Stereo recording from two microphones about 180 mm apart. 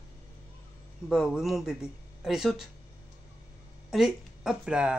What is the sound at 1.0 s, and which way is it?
Speech, centre (ahead or behind).